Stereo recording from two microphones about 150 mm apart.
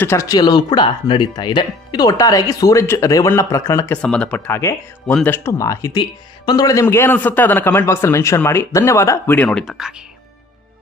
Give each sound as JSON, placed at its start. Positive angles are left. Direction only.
{"t": 0.0, "sound": "speech", "side_deg": 20}
{"t": 3.9, "sound": "speech", "side_deg": 5}
{"t": 9.6, "sound": "speech", "side_deg": -5}